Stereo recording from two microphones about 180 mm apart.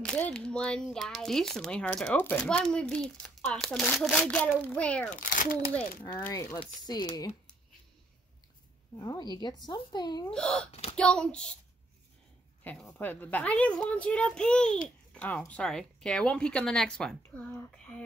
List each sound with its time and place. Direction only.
0.0 s a child's voice: 5° left (ahead or behind)
5.1 s speech: 50° left (ahead or behind)
6.1 s a child's voice: 15° left (ahead or behind)
8.9 s speech: 25° left (ahead or behind)
10.3 s speech: 5° left (ahead or behind)
10.7 s speech: 35° left (ahead or behind)
11.0 s speech: 5° left (ahead or behind)
12.9 s a child's voice: 10° left (ahead or behind)